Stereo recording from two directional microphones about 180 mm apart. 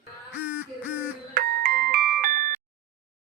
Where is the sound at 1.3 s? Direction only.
55° right (ahead or behind).